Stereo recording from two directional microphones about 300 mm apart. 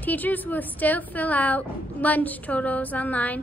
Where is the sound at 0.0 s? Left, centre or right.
Centre.